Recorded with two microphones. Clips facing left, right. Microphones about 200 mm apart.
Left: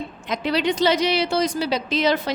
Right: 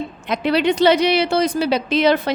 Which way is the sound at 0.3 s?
60° right (ahead or behind).